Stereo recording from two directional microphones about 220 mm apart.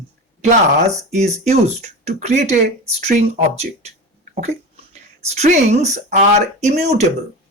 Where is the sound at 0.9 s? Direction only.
30° right (ahead or behind).